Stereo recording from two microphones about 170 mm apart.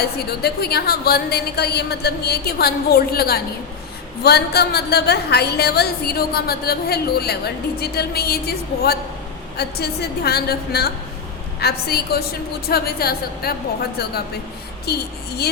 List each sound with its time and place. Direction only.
0.0 s a woman's voice: 70° left (ahead or behind)